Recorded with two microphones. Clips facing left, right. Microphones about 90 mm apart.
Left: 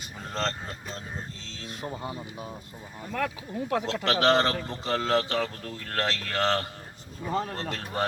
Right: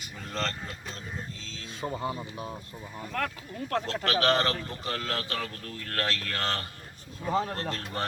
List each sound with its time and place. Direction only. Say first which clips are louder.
0.0 s speech: left 2 dB; 25° left (ahead or behind)
1.9 s speech: right 4 dB; 20° right (ahead or behind)
3.0 s a man's voice: left 2 dB; 5° left (ahead or behind)
4.0 s speech: left 3 dB; 25° left (ahead or behind)
7.2 s speech: right 1 dB; centre (ahead or behind)
7.5 s a man's voice: left 1 dB; 20° left (ahead or behind)